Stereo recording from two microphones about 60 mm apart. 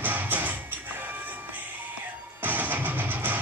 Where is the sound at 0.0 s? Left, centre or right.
Right.